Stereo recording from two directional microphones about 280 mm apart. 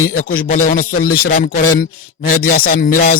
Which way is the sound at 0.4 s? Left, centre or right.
Left.